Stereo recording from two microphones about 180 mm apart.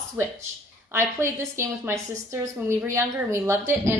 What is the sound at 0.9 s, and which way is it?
A woman's voice, 15° right (ahead or behind).